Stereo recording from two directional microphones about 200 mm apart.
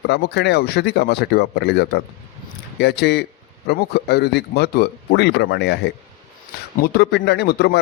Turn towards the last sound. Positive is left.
turn(degrees=55)  # may be behind; listen again after turning